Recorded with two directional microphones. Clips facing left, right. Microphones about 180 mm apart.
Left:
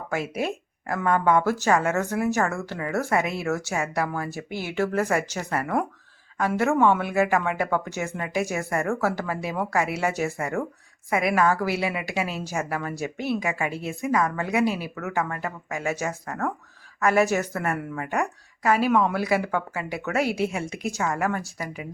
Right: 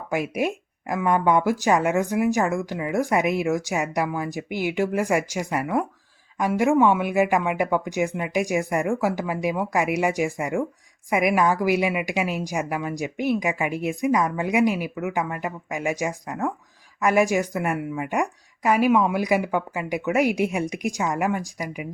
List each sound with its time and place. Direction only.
0.1 s speech: 15° right (ahead or behind)